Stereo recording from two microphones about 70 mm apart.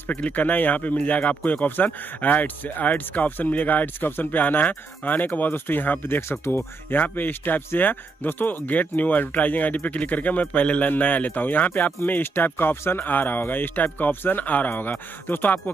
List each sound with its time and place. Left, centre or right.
0.2 s speech: left